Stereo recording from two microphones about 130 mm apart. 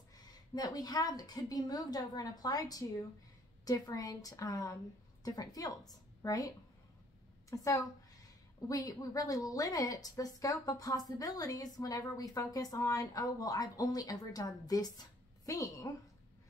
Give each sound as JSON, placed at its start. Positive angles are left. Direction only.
{"t": 0.3, "sound": "a woman's voice", "side_deg": 30}